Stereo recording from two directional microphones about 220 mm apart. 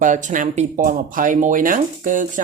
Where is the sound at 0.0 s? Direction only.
35° right (ahead or behind).